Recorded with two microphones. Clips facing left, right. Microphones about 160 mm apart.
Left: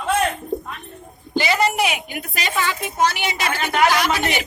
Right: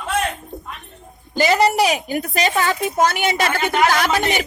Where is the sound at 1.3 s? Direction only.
45° right (ahead or behind).